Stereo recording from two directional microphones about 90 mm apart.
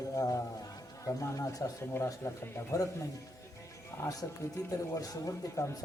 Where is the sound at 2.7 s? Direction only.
40° left (ahead or behind).